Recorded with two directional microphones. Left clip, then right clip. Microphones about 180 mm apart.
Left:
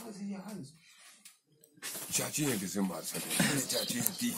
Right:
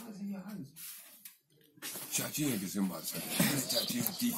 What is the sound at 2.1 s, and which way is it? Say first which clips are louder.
Speech: left 2 dB; 15° left (ahead or behind).